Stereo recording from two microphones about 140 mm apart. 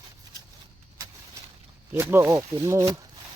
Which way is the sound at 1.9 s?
20° right (ahead or behind).